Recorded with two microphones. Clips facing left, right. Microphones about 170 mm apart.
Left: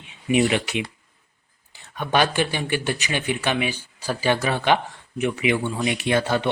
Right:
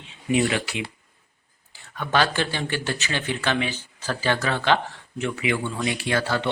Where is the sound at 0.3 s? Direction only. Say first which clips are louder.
Left 2 dB; 20° left (ahead or behind).